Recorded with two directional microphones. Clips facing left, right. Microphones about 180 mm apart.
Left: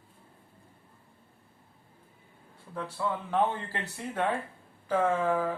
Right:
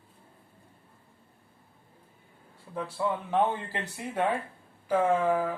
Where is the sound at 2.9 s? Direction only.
15° right (ahead or behind).